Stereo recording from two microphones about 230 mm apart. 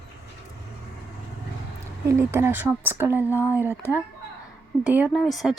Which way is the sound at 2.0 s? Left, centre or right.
Centre.